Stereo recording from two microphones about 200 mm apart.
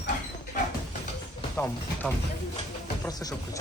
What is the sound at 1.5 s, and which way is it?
Speech, 10° left (ahead or behind).